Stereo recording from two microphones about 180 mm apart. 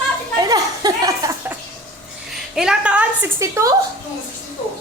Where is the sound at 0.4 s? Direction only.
20° right (ahead or behind).